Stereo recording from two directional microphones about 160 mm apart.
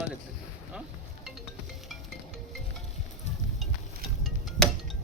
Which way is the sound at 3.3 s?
45° left (ahead or behind).